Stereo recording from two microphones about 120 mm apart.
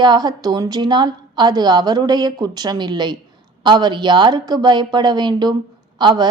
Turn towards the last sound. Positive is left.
turn(degrees=-35)  # may be behind; listen again after turning